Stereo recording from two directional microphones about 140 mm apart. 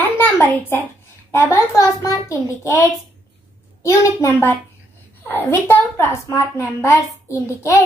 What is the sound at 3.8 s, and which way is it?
A woman's voice, 20° left (ahead or behind).